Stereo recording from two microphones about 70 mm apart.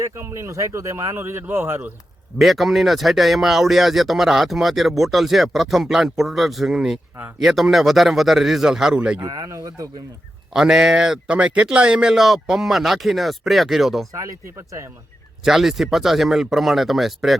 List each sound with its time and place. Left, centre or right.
0.0 s speech: right
2.4 s speech: centre
9.0 s speech: centre
9.2 s speech: right
9.5 s speech: right
10.5 s speech: centre
14.1 s speech: right
15.4 s speech: centre